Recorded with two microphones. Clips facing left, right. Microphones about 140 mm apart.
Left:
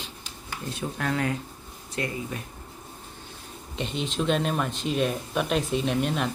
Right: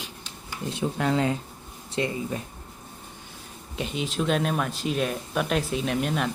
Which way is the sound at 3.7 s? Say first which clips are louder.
Right 1 dB; 5° right (ahead or behind).